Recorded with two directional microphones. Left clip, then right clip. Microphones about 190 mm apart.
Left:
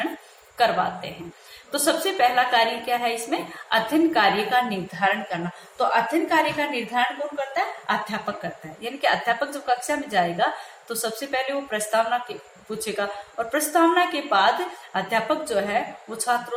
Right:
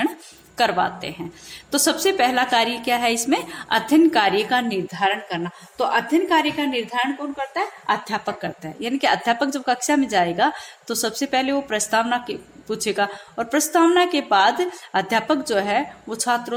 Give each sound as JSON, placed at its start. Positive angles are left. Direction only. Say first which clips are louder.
{"t": 0.5, "sound": "a woman's voice", "louder": "right 1 dB", "side_deg": -60}